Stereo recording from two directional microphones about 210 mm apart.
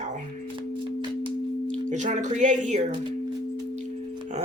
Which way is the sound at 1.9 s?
35° right (ahead or behind).